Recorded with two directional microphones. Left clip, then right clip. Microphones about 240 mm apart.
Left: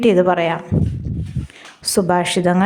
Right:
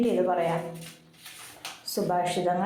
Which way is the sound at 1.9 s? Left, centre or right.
Left.